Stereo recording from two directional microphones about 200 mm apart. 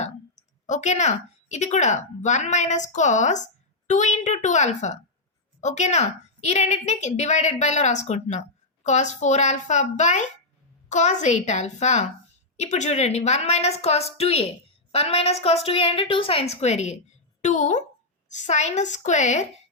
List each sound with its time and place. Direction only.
0.0 s a woman's voice: 35° left (ahead or behind)